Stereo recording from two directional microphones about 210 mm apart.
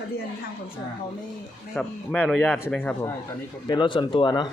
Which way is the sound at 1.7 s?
5° left (ahead or behind).